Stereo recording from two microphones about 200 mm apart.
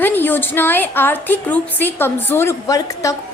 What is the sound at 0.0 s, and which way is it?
A woman's voice, 10° left (ahead or behind).